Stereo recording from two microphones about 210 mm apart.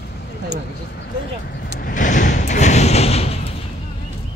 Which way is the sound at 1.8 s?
40° left (ahead or behind).